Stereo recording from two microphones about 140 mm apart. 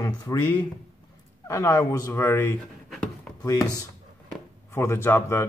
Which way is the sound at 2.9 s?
5° left (ahead or behind).